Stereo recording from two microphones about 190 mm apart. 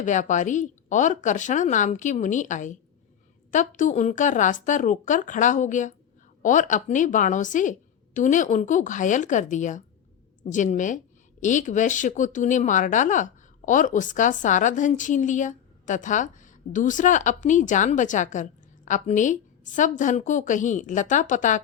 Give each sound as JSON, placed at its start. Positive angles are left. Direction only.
{"t": 0.0, "sound": "a woman's voice", "side_deg": 40}